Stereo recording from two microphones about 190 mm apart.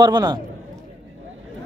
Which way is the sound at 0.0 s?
20° right (ahead or behind).